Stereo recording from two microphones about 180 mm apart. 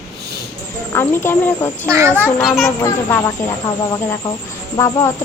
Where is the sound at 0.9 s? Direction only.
15° left (ahead or behind).